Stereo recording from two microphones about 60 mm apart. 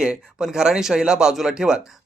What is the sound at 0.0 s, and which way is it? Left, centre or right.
Speech, centre.